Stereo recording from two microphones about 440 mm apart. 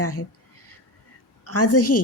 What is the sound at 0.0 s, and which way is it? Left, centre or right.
Speech, left.